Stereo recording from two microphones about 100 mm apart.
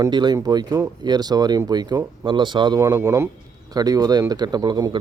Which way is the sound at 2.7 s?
35° right (ahead or behind).